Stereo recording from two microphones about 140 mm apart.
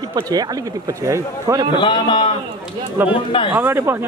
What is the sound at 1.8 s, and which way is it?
A man's voice, 35° left (ahead or behind).